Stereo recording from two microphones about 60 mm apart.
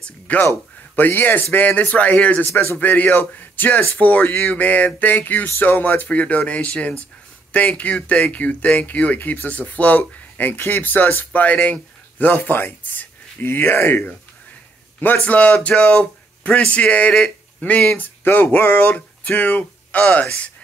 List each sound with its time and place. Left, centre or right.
0.3 s speech: left
4.6 s a man's voice: left